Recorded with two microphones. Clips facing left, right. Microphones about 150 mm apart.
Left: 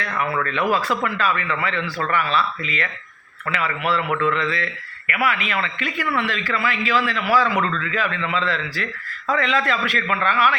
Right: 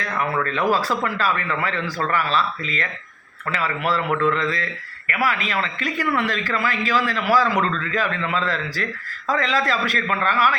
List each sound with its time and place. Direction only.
0.3 s speech: 35° right (ahead or behind)